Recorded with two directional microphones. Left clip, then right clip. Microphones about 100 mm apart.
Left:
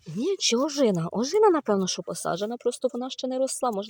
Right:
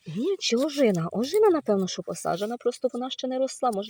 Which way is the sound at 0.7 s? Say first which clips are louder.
Even; 10° right (ahead or behind).